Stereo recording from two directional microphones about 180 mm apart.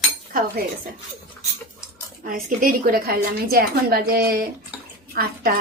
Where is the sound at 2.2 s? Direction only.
50° right (ahead or behind).